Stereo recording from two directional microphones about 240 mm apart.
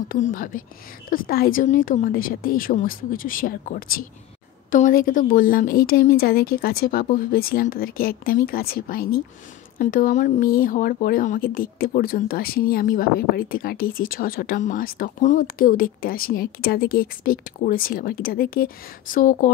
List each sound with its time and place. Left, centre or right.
0.3 s speech: left